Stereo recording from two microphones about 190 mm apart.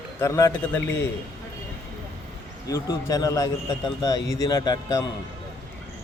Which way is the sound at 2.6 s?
20° left (ahead or behind).